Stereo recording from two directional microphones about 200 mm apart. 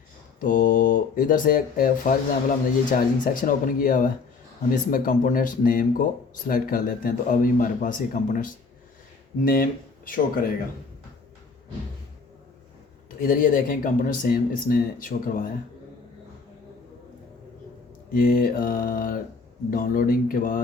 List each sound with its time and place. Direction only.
0.3 s speech: 40° left (ahead or behind)
13.1 s speech: 45° left (ahead or behind)
18.1 s speech: 45° left (ahead or behind)